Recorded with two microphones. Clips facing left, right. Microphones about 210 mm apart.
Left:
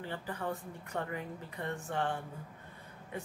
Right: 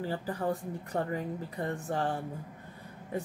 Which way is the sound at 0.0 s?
35° right (ahead or behind).